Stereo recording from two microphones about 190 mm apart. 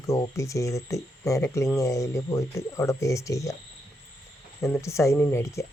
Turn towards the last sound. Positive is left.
turn(degrees=15)  # may be behind; listen again after turning